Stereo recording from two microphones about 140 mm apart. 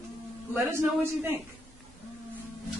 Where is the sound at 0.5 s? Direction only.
20° right (ahead or behind).